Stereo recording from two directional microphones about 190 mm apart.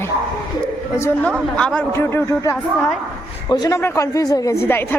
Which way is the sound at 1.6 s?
5° left (ahead or behind).